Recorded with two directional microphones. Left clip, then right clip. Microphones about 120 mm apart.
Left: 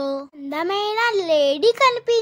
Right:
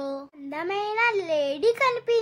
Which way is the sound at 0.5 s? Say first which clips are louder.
Left 6 dB; 50° left (ahead or behind).